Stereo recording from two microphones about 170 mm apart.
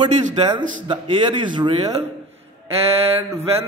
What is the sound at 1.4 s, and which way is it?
Mantra, 25° right (ahead or behind).